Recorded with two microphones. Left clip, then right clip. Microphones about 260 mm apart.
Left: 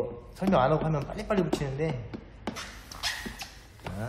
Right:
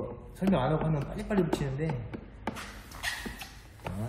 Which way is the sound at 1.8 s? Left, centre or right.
Centre.